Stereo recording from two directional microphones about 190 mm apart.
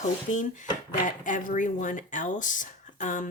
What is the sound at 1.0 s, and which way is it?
Speech, 45° left (ahead or behind).